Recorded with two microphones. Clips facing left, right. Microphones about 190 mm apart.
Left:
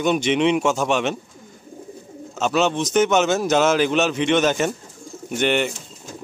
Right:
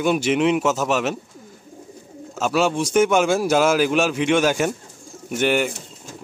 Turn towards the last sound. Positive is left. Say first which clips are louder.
# even
turn(degrees=-5)  # may be behind; listen again after turning